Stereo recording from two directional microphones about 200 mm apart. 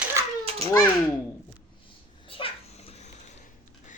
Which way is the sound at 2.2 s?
25° left (ahead or behind).